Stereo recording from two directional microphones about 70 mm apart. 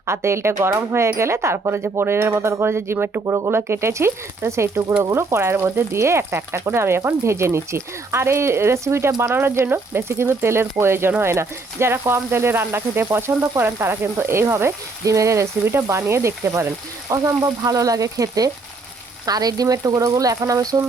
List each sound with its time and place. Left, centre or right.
0.0 s speech: right
3.2 s speech: right
3.5 s speech: right
17.6 s speech: right